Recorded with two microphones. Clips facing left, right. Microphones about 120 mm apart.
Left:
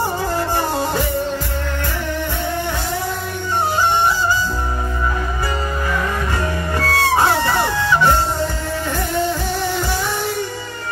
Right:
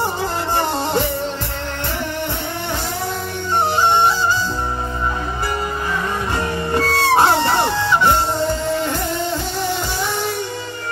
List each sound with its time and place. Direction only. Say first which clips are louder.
0.6 s music: right 1 dB; 25° right (ahead or behind)
6.7 s music: right 2 dB; 25° right (ahead or behind)